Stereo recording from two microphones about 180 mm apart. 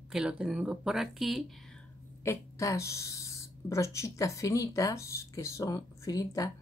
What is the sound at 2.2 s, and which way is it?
Speech, 15° left (ahead or behind).